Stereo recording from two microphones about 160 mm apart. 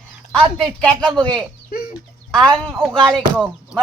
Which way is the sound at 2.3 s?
5° left (ahead or behind).